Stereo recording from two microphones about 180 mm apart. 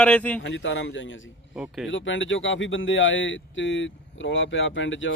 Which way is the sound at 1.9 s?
90° left.